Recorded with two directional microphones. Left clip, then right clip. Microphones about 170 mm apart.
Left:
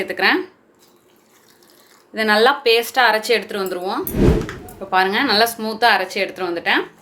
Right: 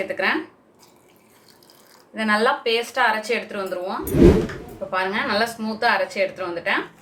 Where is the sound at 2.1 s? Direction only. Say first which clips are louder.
Left 5 dB; 65° left (ahead or behind).